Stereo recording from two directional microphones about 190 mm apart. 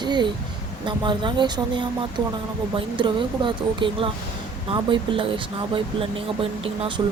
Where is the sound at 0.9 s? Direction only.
25° right (ahead or behind).